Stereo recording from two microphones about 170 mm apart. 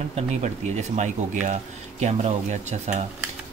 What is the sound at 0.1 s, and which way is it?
Speech, 40° right (ahead or behind).